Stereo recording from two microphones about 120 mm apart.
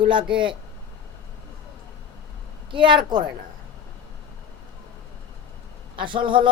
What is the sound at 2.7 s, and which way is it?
Speech, 45° right (ahead or behind).